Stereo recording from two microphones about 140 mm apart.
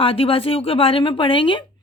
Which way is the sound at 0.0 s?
40° left (ahead or behind).